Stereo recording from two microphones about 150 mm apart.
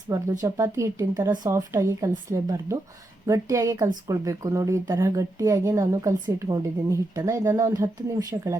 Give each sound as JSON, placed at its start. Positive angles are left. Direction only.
{"t": 0.1, "sound": "a woman's voice", "side_deg": -20}